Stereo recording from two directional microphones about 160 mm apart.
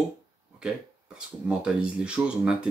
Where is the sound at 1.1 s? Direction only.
5° right (ahead or behind).